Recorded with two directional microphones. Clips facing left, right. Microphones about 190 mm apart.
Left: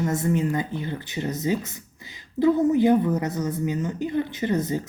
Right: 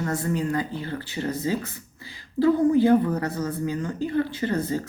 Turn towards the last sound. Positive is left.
turn(degrees=20)  # may be behind; listen again after turning